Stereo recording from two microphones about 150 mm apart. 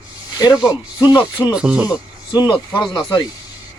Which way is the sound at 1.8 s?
25° left (ahead or behind).